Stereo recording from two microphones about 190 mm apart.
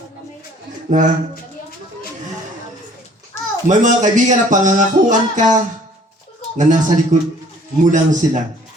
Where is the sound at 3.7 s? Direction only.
40° right (ahead or behind).